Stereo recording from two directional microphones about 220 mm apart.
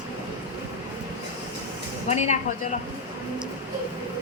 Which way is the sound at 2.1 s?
30° left (ahead or behind).